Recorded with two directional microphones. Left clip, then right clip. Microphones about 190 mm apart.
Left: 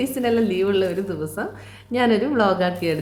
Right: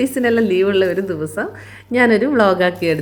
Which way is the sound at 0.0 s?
30° right (ahead or behind).